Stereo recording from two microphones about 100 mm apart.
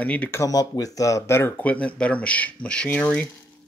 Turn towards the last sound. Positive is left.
turn(degrees=10)  # may be behind; listen again after turning